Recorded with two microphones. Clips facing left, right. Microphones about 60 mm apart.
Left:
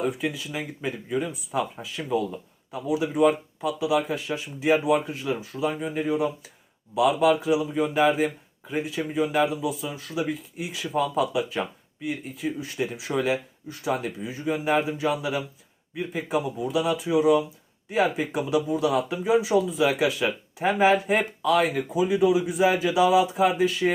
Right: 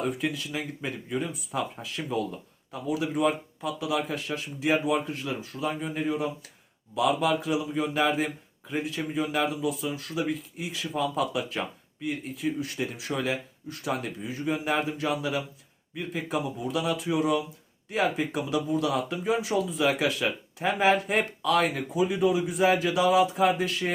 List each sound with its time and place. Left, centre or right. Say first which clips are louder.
0.0 s speech: left 2 dB; centre
10.6 s speech: left 5 dB; left
19.1 s speech: left 5 dB; centre
20.2 s speech: left 3 dB; left